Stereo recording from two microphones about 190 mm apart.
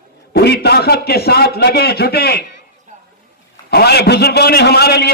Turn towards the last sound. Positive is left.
turn(degrees=60)  # may be behind; listen again after turning